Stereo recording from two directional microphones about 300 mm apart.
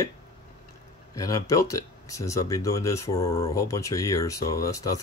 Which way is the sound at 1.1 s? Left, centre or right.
Centre.